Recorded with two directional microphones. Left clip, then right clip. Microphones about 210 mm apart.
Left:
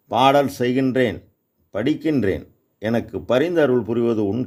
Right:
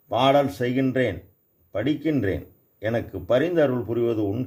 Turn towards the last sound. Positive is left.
turn(degrees=40)  # may be behind; listen again after turning